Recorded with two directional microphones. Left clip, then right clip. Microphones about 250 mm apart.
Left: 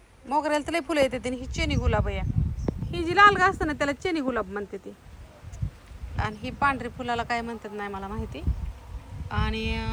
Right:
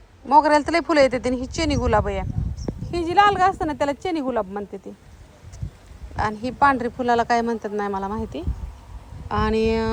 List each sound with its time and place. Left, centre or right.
0.3 s speech: centre
6.1 s speech: centre